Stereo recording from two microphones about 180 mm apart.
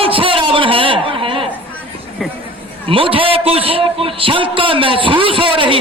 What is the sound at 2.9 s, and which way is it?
A man's voice, 30° right (ahead or behind).